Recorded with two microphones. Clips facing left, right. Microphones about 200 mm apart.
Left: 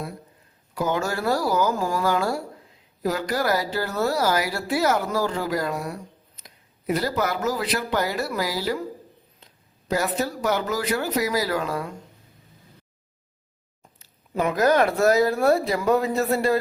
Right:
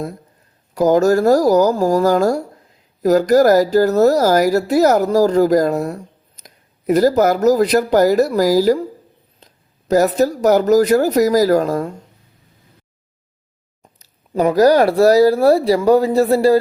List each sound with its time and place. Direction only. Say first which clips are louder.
0.7 s speech: right 13 dB; 40° right (ahead or behind)
9.4 s a sound: right 8 dB; 40° right (ahead or behind)
9.9 s speech: right 11 dB; 40° right (ahead or behind)
14.0 s speech: right 8 dB; 35° right (ahead or behind)